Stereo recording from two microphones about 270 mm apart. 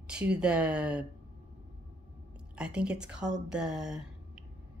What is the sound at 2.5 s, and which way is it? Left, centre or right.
Speech, centre.